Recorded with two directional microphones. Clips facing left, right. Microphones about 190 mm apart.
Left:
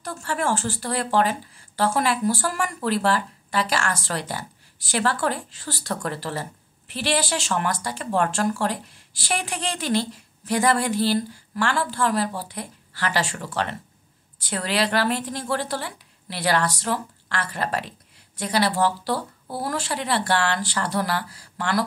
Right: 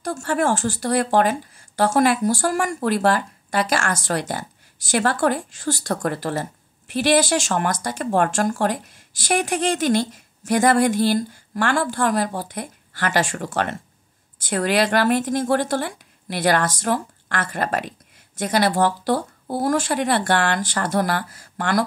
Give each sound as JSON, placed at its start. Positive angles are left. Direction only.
{"t": 0.0, "sound": "speech", "side_deg": -45}